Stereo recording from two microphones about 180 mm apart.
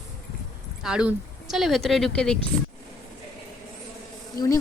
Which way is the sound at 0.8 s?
5° right (ahead or behind).